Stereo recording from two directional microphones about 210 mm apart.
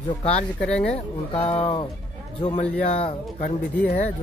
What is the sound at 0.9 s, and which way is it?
Speech, 30° left (ahead or behind).